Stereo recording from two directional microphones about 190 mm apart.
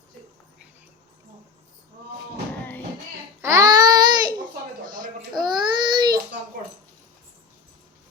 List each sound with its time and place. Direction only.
3.4 s baby cry: 15° right (ahead or behind)
5.5 s baby cry: 25° right (ahead or behind)